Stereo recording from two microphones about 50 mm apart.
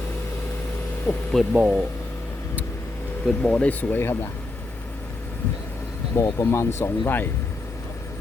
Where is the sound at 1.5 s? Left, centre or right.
Right.